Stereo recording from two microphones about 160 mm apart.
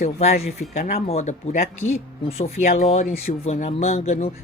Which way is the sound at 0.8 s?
65° left (ahead or behind).